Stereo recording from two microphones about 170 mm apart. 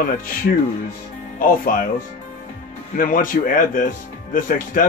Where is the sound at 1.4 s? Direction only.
55° left (ahead or behind).